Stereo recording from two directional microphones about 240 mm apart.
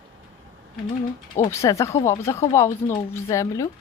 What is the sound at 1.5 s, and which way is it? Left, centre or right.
Speech, centre.